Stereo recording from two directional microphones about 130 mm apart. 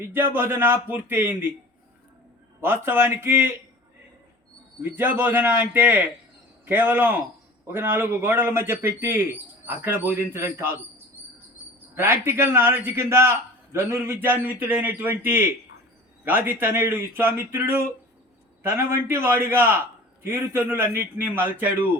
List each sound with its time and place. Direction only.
0.0 s a man's voice: 20° right (ahead or behind)
2.6 s a man's voice: 15° right (ahead or behind)
4.8 s a man's voice: 15° right (ahead or behind)